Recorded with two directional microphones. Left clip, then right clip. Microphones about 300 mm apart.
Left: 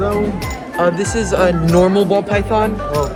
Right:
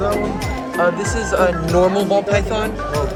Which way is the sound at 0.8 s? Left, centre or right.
Left.